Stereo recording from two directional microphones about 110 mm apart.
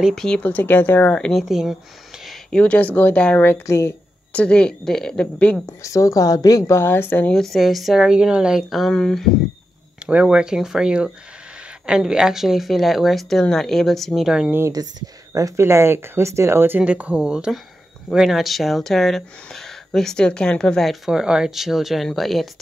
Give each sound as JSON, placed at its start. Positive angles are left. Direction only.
{"t": 0.0, "sound": "speech", "side_deg": 5}
{"t": 2.2, "sound": "speech", "side_deg": 10}
{"t": 4.3, "sound": "speech", "side_deg": 10}
{"t": 5.7, "sound": "a woman's voice", "side_deg": 25}
{"t": 6.8, "sound": "speech", "side_deg": 20}
{"t": 7.3, "sound": "speech", "side_deg": 0}
{"t": 10.0, "sound": "speech", "side_deg": -10}
{"t": 14.7, "sound": "speech", "side_deg": -35}